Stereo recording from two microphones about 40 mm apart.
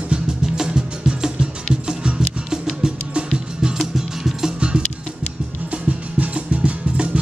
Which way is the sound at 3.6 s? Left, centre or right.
Centre.